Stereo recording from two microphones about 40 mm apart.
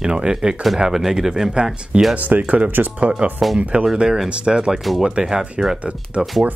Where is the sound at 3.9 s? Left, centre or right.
Centre.